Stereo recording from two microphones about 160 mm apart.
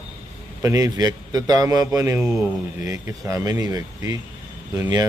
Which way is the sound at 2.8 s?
20° right (ahead or behind).